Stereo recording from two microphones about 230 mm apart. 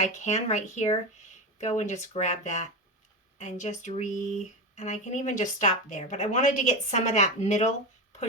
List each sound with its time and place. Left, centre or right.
0.0 s speech: left